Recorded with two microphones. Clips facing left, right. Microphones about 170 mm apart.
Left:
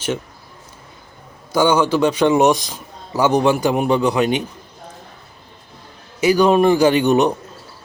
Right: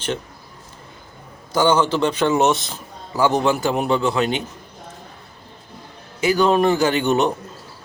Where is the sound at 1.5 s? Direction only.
10° left (ahead or behind).